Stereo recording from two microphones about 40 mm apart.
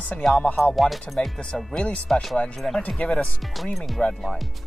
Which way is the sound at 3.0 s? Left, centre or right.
Left.